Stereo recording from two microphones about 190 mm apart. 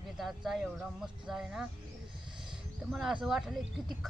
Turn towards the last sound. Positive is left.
turn(degrees=0)  # may be behind; listen again after turning